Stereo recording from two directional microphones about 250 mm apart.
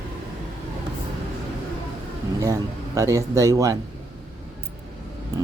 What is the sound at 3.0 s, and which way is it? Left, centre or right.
Speech, centre.